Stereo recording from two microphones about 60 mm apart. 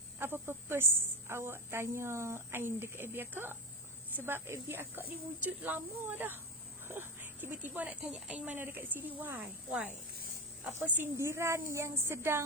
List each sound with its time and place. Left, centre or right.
0.2 s a woman's voice: right
10.7 s a woman's voice: right
11.2 s a woman's voice: right